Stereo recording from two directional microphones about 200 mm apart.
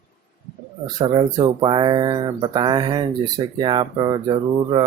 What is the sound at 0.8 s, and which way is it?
Speech, 25° right (ahead or behind).